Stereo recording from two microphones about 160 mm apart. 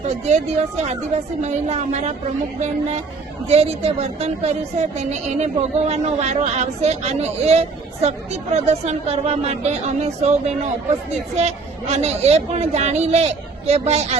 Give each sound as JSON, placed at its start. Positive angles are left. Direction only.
{"t": 0.0, "sound": "speech", "side_deg": -45}